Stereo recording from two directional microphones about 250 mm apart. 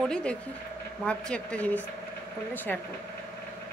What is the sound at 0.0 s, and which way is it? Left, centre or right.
A woman's voice, centre.